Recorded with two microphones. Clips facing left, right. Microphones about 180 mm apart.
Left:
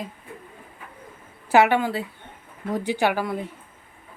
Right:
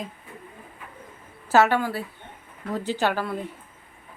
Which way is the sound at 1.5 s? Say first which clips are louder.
Left 2 dB; 15° left (ahead or behind).